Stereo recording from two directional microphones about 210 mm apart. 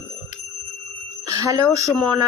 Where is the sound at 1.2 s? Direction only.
15° right (ahead or behind).